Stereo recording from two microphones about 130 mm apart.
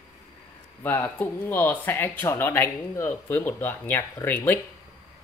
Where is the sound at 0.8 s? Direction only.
15° left (ahead or behind).